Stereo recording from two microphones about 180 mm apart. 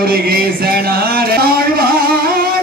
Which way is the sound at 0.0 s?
55° right (ahead or behind).